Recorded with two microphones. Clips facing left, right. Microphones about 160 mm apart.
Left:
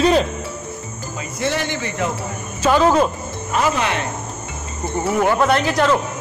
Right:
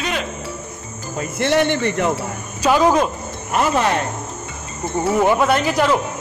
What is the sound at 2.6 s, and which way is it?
Speech, 10° right (ahead or behind).